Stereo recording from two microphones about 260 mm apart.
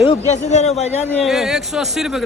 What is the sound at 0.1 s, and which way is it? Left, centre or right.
Speech, left.